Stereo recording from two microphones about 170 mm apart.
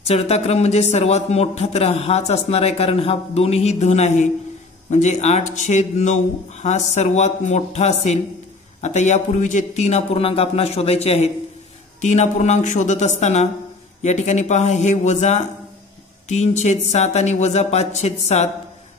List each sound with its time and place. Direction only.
0.1 s a man's voice: 35° left (ahead or behind)